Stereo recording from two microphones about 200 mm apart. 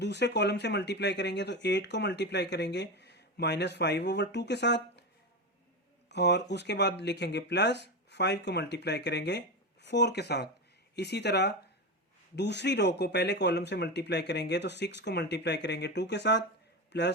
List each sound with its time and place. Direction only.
0.0 s speech: 60° left (ahead or behind)
6.1 s speech: 60° left (ahead or behind)